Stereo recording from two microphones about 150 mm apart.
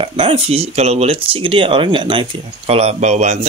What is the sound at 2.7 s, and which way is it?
Speech, 45° right (ahead or behind).